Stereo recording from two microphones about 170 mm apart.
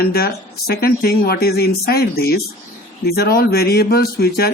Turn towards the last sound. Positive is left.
turn(degrees=65)  # may be behind; listen again after turning